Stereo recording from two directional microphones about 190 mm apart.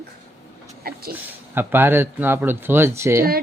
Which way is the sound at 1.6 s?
10° right (ahead or behind).